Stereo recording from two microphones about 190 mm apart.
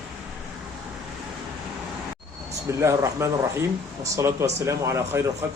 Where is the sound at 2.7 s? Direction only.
15° right (ahead or behind).